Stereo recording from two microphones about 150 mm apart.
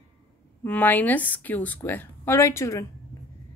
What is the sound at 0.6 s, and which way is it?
A woman's voice, 10° left (ahead or behind).